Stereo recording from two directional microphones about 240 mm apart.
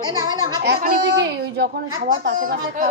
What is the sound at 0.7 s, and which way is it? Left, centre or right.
A woman's voice, right.